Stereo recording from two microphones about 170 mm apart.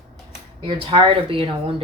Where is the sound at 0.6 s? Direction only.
30° right (ahead or behind).